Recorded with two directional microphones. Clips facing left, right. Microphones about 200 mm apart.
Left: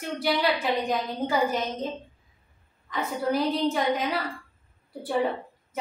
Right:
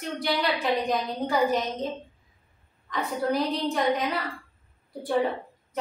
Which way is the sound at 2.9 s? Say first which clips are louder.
Even; centre (ahead or behind).